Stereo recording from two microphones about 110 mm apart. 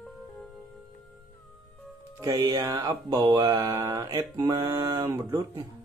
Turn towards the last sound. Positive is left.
turn(degrees=-25)  # may be behind; listen again after turning